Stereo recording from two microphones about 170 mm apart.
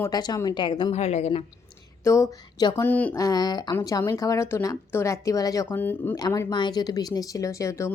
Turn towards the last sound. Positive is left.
turn(degrees=15)  # may be behind; listen again after turning